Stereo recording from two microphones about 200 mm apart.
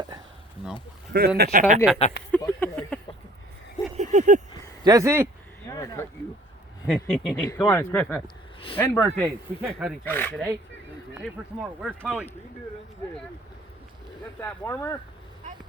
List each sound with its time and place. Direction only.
1.4 s speech: 40° right (ahead or behind)
2.0 s speech: 35° left (ahead or behind)
2.4 s speech: 10° left (ahead or behind)
3.9 s a sound: 35° right (ahead or behind)
4.8 s speech: 15° right (ahead or behind)
5.6 s a sound: 15° left (ahead or behind)
6.8 s speech: centre (ahead or behind)
9.2 s speech: 10° right (ahead or behind)
10.0 s speech: 10° left (ahead or behind)
11.6 s speech: 5° right (ahead or behind)
14.4 s speech: 15° left (ahead or behind)